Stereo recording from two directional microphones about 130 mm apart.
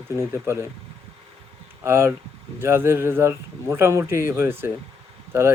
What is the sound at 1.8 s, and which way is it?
Speech, 20° right (ahead or behind).